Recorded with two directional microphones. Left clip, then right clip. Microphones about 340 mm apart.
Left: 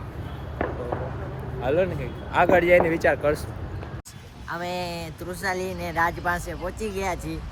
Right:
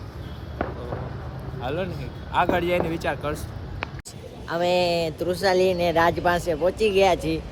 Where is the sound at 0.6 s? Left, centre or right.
Right.